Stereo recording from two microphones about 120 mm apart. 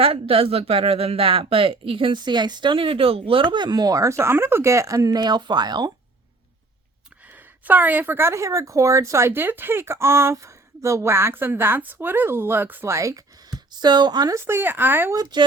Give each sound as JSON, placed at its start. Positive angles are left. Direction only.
{"t": 0.0, "sound": "speech", "side_deg": -50}
{"t": 7.6, "sound": "speech", "side_deg": -15}
{"t": 15.1, "sound": "speech", "side_deg": -35}